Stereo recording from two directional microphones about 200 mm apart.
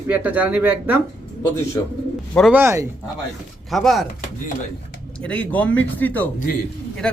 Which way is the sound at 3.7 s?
Centre (ahead or behind).